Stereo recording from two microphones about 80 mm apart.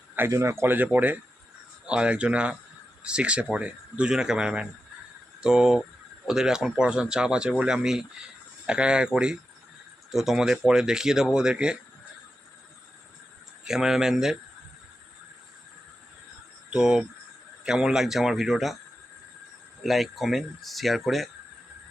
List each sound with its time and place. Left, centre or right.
0.2 s speech: right; by 11.8 s centre
13.7 s speech: centre
16.7 s speech: centre
19.8 s speech: centre